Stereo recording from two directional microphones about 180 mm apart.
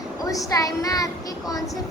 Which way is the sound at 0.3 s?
20° left (ahead or behind).